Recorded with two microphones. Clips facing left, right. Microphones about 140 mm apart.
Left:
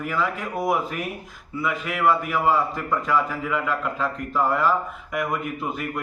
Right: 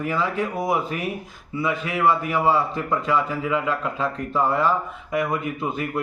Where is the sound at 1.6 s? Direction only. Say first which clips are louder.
Right 1 dB; 25° right (ahead or behind).